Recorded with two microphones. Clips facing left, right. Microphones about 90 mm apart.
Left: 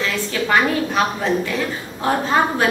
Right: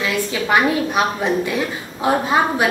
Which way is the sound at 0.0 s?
15° right (ahead or behind).